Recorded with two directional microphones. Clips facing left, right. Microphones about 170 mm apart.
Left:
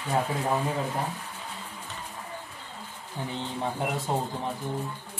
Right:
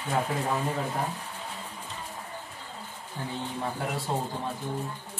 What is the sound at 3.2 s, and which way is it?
Speech, 15° left (ahead or behind).